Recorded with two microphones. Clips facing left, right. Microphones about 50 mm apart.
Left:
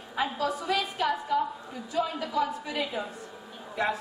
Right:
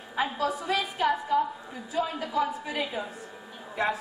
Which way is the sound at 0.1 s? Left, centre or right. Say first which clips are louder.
Right 1 dB; centre.